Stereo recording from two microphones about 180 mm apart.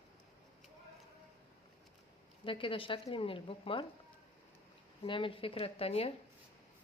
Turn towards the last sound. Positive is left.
turn(degrees=35)  # may be behind; listen again after turning